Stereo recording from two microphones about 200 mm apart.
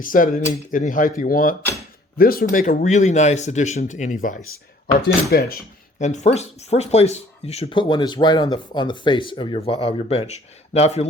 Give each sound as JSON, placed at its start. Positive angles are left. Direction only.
{"t": 0.0, "sound": "speech", "side_deg": 45}
{"t": 5.0, "sound": "speech", "side_deg": 50}